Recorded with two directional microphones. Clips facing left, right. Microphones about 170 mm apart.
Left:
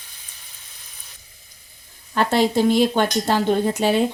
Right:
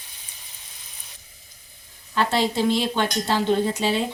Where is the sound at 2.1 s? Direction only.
50° left (ahead or behind).